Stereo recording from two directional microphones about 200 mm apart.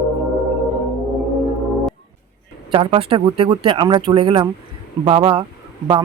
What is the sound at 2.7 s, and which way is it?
Speech, 25° right (ahead or behind).